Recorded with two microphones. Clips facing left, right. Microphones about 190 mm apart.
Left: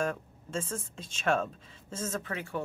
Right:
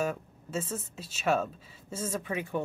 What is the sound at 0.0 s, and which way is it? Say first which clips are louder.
Speech: right 1 dB; 5° right (ahead or behind).